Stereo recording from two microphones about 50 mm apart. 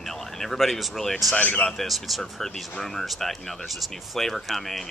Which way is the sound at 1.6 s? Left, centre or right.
Centre.